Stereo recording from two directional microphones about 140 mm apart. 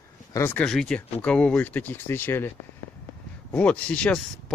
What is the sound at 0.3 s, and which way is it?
Speech, 15° left (ahead or behind).